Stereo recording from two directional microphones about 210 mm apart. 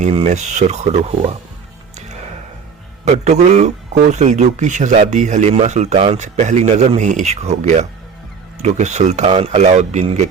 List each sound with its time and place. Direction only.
0.0 s speech: 30° right (ahead or behind)
3.0 s speech: 35° right (ahead or behind)